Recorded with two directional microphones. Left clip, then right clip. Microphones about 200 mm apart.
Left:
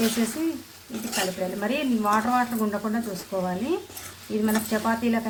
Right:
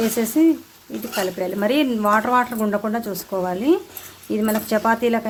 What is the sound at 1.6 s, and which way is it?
Speech, 55° right (ahead or behind).